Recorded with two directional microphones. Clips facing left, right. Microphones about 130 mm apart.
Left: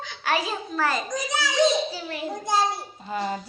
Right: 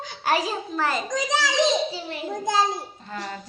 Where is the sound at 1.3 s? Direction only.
90° right.